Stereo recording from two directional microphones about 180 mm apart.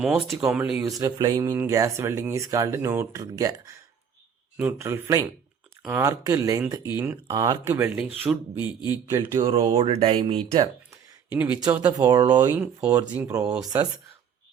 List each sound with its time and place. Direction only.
0.0 s speech: 5° right (ahead or behind)
0.9 s speech: 20° right (ahead or behind)
7.9 s speech: 5° right (ahead or behind)
8.5 s a man's voice: 25° left (ahead or behind)
8.9 s speech: 15° right (ahead or behind)
11.3 s speech: 10° right (ahead or behind)
11.9 s speech: 20° right (ahead or behind)
12.4 s speech: 10° right (ahead or behind)